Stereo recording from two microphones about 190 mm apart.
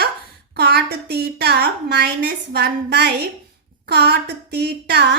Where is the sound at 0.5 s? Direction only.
60° right (ahead or behind).